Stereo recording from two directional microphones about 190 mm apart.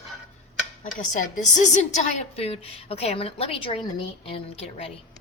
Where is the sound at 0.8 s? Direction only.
45° left (ahead or behind); by 4.4 s 25° left (ahead or behind).